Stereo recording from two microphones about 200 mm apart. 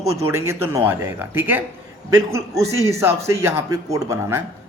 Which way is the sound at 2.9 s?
15° right (ahead or behind).